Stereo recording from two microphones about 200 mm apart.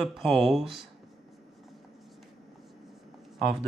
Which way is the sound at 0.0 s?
Centre (ahead or behind).